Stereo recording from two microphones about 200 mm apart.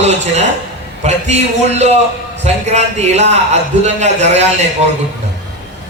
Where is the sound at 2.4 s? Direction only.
35° right (ahead or behind).